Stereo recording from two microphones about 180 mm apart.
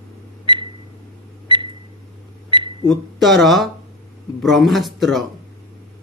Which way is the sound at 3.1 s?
Centre (ahead or behind).